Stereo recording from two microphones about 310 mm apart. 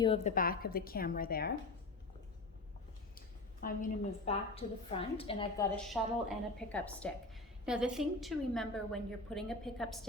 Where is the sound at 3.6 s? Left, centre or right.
Left.